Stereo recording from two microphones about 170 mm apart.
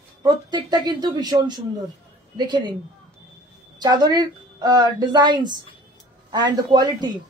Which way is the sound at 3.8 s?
25° right (ahead or behind).